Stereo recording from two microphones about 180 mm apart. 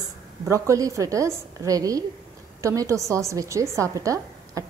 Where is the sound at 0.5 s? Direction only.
20° right (ahead or behind).